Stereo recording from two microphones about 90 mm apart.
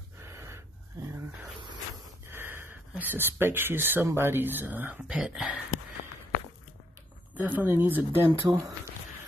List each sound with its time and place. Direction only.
0.2 s a sound: 35° right (ahead or behind)
2.2 s a sound: 25° right (ahead or behind)
3.0 s speech: 25° right (ahead or behind)
5.0 s speech: 10° right (ahead or behind)
7.3 s speech: 20° right (ahead or behind)
8.5 s speech: 40° right (ahead or behind)